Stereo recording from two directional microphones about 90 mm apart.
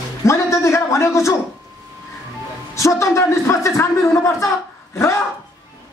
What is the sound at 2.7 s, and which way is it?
A man's voice, 35° left (ahead or behind).